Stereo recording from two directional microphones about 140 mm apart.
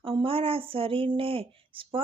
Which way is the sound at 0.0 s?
40° right (ahead or behind).